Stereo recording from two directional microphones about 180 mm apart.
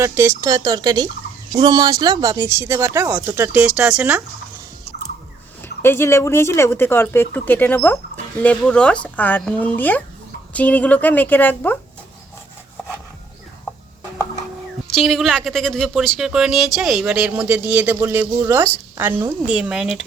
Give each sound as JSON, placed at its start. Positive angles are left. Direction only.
{"t": 0.0, "sound": "speech", "side_deg": -15}
{"t": 5.8, "sound": "speech", "side_deg": 15}
{"t": 14.8, "sound": "speech", "side_deg": 0}